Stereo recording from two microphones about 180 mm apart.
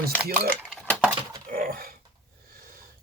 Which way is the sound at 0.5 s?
5° left (ahead or behind).